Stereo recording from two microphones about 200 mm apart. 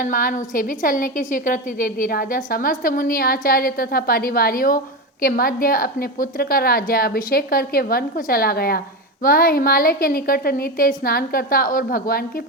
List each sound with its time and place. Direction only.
0.0 s a woman's voice: 45° left (ahead or behind)